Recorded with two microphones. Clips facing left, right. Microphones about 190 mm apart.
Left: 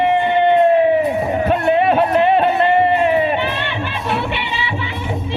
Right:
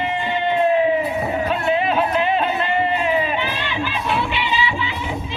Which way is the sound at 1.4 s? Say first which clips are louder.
Left 7 dB; 55° left (ahead or behind).